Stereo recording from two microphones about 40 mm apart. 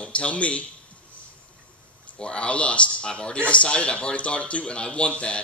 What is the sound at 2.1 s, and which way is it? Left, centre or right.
A man's voice, left.